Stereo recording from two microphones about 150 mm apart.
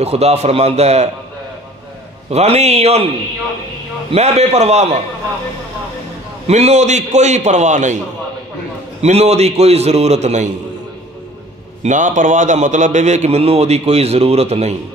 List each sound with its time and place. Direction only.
0.0 s a man's voice: 45° right (ahead or behind)
2.3 s a man's voice: 45° right (ahead or behind)
4.1 s a man's voice: 45° right (ahead or behind)
6.4 s a man's voice: 45° right (ahead or behind)
9.0 s a man's voice: 45° right (ahead or behind)
11.8 s a man's voice: 55° right (ahead or behind)